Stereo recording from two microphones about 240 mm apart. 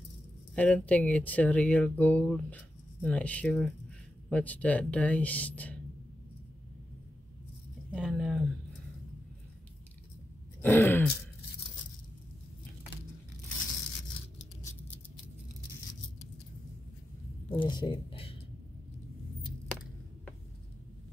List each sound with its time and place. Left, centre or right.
0.6 s speech: centre
7.9 s speech: centre
10.6 s throat clearing: centre
17.5 s a sound: centre